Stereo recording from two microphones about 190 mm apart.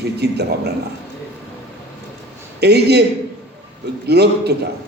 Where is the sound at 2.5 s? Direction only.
60° right (ahead or behind).